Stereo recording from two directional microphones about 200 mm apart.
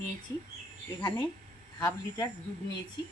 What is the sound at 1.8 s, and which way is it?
Speech, 20° left (ahead or behind).